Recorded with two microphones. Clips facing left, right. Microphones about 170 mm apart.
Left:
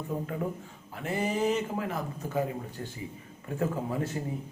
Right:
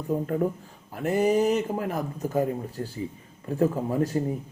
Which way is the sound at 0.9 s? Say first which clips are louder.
Right 8 dB; 40° right (ahead or behind).